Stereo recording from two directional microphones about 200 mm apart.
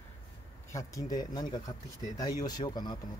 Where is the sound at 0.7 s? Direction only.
15° left (ahead or behind).